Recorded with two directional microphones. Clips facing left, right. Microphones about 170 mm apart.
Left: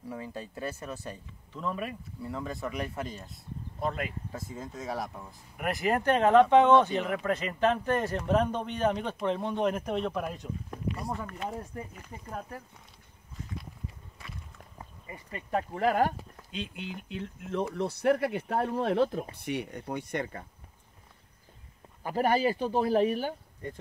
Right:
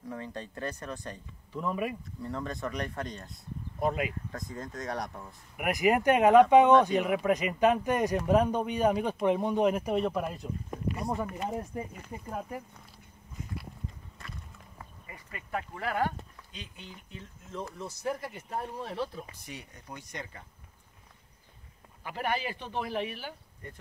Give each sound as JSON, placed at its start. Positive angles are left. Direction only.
{"t": 0.1, "sound": "speech", "side_deg": 10}
{"t": 1.5, "sound": "speech", "side_deg": -10}
{"t": 2.2, "sound": "speech", "side_deg": 5}
{"t": 3.8, "sound": "speech", "side_deg": -10}
{"t": 4.3, "sound": "speech", "side_deg": 5}
{"t": 5.6, "sound": "speech", "side_deg": -10}
{"t": 14.8, "sound": "speech", "side_deg": 25}
{"t": 16.7, "sound": "speech", "side_deg": 70}
{"t": 19.3, "sound": "speech", "side_deg": 65}
{"t": 22.0, "sound": "speech", "side_deg": 40}